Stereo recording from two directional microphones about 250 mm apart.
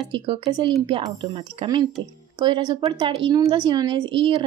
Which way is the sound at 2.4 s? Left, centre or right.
Centre.